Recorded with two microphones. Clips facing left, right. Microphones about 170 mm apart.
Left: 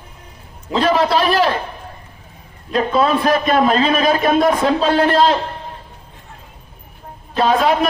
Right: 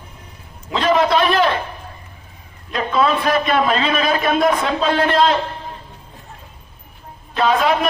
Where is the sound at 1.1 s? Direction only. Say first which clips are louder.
Even; 35° left (ahead or behind).